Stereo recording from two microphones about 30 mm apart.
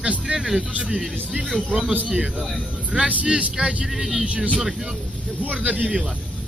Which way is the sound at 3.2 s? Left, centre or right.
Right.